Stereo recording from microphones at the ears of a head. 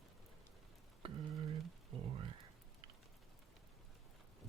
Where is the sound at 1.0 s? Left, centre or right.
Right.